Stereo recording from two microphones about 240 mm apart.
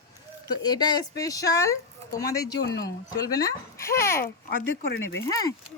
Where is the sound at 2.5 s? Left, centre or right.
Left.